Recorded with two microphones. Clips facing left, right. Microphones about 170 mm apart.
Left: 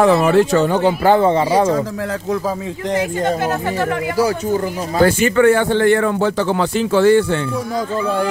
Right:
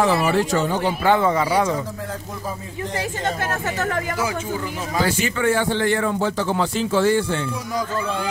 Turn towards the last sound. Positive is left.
turn(degrees=65)  # may be behind; listen again after turning